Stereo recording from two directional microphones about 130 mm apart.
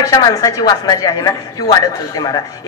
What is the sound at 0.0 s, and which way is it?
A woman's voice, 25° left (ahead or behind).